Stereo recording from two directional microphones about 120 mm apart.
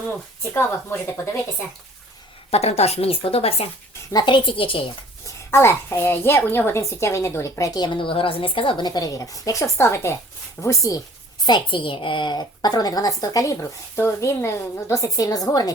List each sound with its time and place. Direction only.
0.5 s a woman's voice: 20° left (ahead or behind)
2.5 s speech: 60° left (ahead or behind)
4.1 s speech: 40° left (ahead or behind)
5.5 s a woman's voice: 20° left (ahead or behind)
7.9 s a woman's voice: 45° left (ahead or behind); by 11.0 s 25° left (ahead or behind)
11.4 s a woman's voice: 40° left (ahead or behind)